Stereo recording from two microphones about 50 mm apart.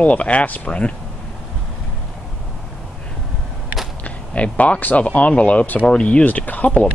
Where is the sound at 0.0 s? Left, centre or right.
Left.